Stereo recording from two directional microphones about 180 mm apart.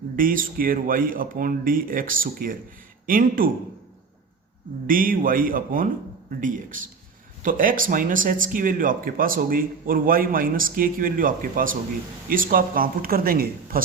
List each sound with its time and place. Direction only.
0.2 s speech: 50° right (ahead or behind)
4.9 s speech: 50° right (ahead or behind)